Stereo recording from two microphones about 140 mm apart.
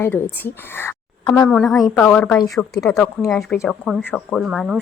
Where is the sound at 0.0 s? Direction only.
15° left (ahead or behind).